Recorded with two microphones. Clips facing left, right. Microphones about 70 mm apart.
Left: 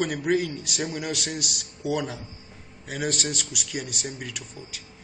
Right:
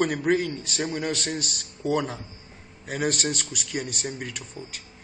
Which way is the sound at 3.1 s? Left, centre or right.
Centre.